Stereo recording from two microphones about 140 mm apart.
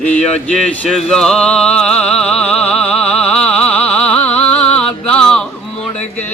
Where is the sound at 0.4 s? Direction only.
5° left (ahead or behind).